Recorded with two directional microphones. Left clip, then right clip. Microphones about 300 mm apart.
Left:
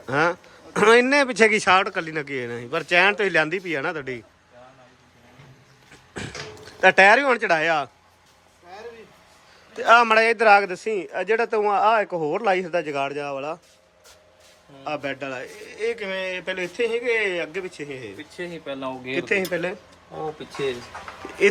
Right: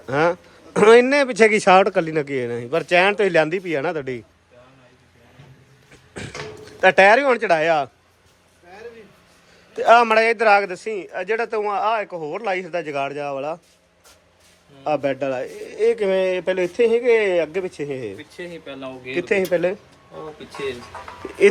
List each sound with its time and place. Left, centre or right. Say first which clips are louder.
0.0 s speech: right 2 dB; centre
6.7 s speech: right 1 dB; centre
9.7 s speech: right 2 dB; centre
14.8 s speech: right 7 dB; centre
18.2 s speech: even; left
19.1 s speech: right 4 dB; centre